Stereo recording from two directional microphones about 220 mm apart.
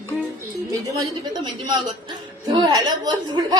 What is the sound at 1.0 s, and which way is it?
A woman's voice, 20° right (ahead or behind).